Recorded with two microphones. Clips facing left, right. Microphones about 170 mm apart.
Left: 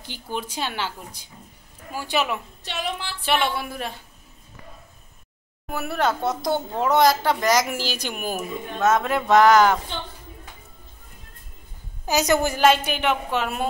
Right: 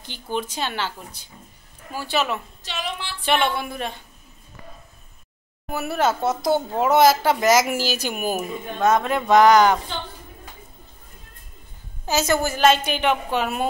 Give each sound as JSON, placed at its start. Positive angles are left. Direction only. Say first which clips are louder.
{"t": 0.0, "sound": "a woman's voice", "louder": "right 3 dB", "side_deg": 10}
{"t": 2.6, "sound": "a sound", "louder": "left 1 dB", "side_deg": 55}
{"t": 3.3, "sound": "speech", "louder": "right 2 dB", "side_deg": 5}
{"t": 5.7, "sound": "speech", "louder": "right 2 dB", "side_deg": -5}
{"t": 12.1, "sound": "a woman's voice", "louder": "left 1 dB", "side_deg": 15}